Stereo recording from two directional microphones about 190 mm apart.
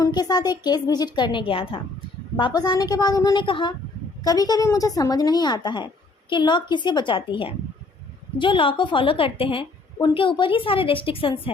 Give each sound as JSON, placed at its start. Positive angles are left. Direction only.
{"t": 0.0, "sound": "a woman's voice", "side_deg": 20}